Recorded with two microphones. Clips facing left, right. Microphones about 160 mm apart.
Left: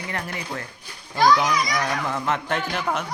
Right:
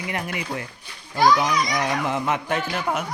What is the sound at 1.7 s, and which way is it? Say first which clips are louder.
Speech: right 2 dB; 15° right (ahead or behind).